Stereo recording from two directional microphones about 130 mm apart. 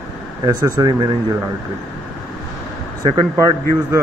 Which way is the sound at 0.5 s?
30° right (ahead or behind).